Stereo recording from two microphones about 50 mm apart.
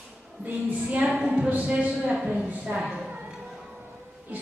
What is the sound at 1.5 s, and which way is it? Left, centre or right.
Music, right.